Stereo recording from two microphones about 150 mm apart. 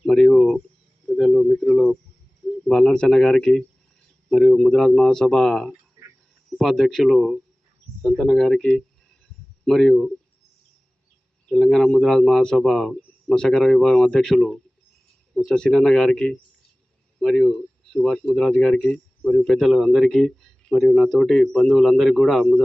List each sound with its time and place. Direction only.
0.0 s a sound: 5° left (ahead or behind)
2.5 s a man's voice: 5° left (ahead or behind)
11.4 s a man's voice: centre (ahead or behind)